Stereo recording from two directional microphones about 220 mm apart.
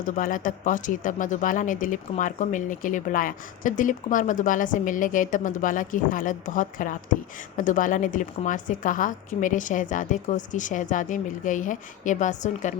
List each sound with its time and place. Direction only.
0.2 s speech: 35° left (ahead or behind)